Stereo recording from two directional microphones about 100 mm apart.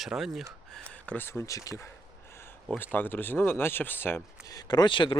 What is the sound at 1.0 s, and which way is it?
Speech, 15° left (ahead or behind).